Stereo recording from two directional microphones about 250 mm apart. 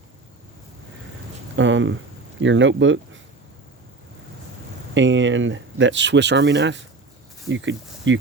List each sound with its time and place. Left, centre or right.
1.5 s speech: right
4.9 s speech: right